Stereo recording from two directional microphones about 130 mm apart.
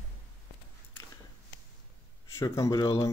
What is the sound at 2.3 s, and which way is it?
Speech, 25° left (ahead or behind).